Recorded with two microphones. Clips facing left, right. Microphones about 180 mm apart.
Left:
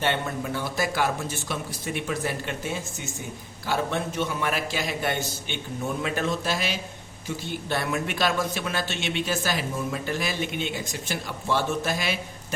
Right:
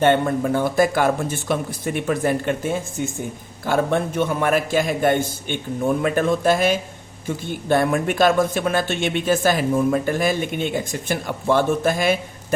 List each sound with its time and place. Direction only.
0.0 s a man's voice: 50° right (ahead or behind)